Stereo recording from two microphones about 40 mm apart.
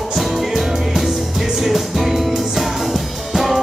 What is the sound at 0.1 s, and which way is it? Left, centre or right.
Music, centre.